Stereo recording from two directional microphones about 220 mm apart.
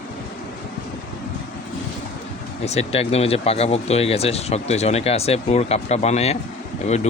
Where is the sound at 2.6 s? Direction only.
30° left (ahead or behind).